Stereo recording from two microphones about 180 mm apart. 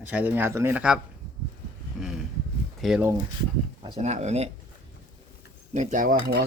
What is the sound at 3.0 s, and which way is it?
Speech, 15° right (ahead or behind).